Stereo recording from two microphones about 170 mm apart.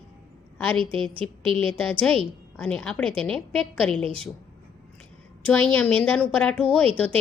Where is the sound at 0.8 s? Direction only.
30° right (ahead or behind).